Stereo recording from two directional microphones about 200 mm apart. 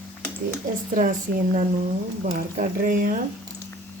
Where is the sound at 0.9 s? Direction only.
45° right (ahead or behind).